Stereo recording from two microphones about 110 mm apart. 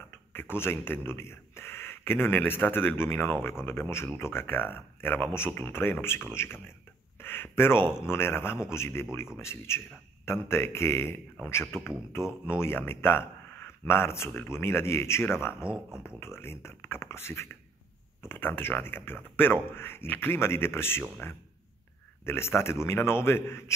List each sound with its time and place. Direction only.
0.3 s speech: 20° left (ahead or behind)
15.7 s speech: 10° right (ahead or behind)
16.2 s speech: 25° left (ahead or behind)